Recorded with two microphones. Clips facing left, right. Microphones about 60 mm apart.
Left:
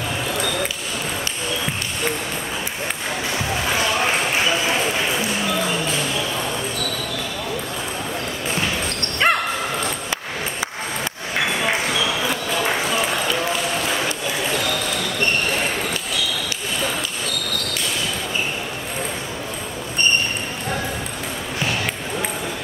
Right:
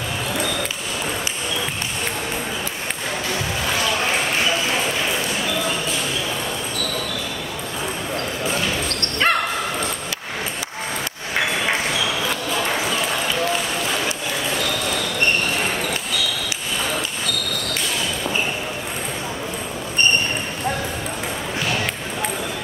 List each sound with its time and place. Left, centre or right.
9.2 s bow-wow: centre